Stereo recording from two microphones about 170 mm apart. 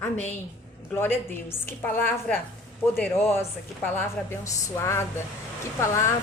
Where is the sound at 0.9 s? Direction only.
15° left (ahead or behind).